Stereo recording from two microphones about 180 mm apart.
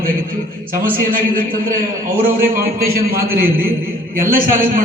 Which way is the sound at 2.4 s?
55° right (ahead or behind).